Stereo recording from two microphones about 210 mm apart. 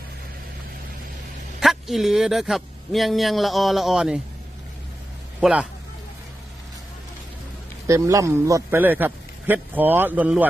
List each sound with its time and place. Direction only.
1.6 s speech: centre (ahead or behind)
5.4 s a man's voice: 5° right (ahead or behind)
7.9 s a man's voice: 15° right (ahead or behind)